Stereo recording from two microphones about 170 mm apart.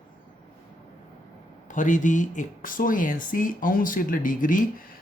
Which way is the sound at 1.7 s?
50° left (ahead or behind).